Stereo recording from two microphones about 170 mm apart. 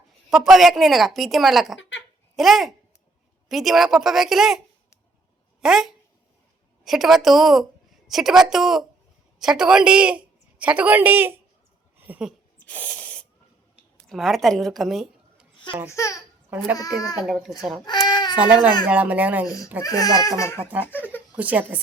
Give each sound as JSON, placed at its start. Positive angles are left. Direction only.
{"t": 0.3, "sound": "speech", "side_deg": 0}
{"t": 5.6, "sound": "a woman's voice", "side_deg": 0}
{"t": 11.9, "sound": "a sound", "side_deg": -10}
{"t": 12.6, "sound": "a sound", "side_deg": 10}
{"t": 14.1, "sound": "a woman's voice", "side_deg": 0}
{"t": 15.9, "sound": "a child's voice", "side_deg": 20}
{"t": 17.2, "sound": "speech", "side_deg": -5}
{"t": 17.8, "sound": "baby cry", "side_deg": 25}
{"t": 18.3, "sound": "speech", "side_deg": -10}
{"t": 19.8, "sound": "speech", "side_deg": 20}
{"t": 21.3, "sound": "speech", "side_deg": -10}